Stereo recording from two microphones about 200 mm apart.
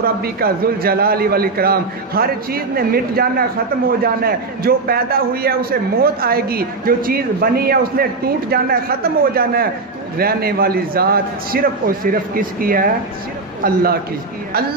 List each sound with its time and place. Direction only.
0.0 s a man's voice: 50° right (ahead or behind)